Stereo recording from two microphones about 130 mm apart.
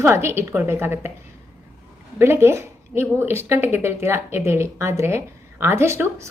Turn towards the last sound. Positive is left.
turn(degrees=-20)  # may be behind; listen again after turning